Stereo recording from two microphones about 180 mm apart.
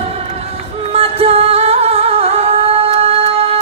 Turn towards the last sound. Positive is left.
turn(degrees=-35)  # may be behind; listen again after turning